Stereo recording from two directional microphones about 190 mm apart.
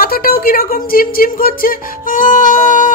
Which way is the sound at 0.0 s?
50° left (ahead or behind).